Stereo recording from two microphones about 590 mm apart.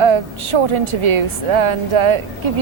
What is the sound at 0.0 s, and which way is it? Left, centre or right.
A woman's voice, right.